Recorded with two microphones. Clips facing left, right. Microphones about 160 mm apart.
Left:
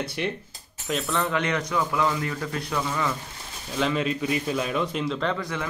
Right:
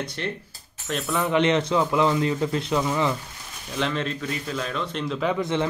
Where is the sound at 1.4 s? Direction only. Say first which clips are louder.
Right 5 dB; 25° right (ahead or behind).